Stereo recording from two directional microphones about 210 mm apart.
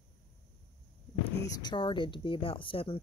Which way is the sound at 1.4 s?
20° left (ahead or behind).